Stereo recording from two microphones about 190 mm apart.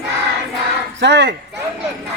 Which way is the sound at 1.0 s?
65° right (ahead or behind).